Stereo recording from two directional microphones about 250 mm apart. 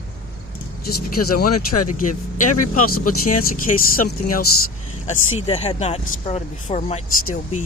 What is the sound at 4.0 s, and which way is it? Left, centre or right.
Speech, left.